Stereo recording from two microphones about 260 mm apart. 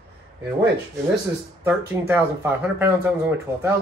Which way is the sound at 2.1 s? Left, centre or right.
Centre.